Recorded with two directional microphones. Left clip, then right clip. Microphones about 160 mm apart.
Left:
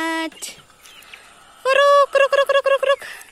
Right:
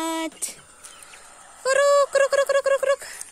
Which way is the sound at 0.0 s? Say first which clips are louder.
Left 4 dB; centre (ahead or behind).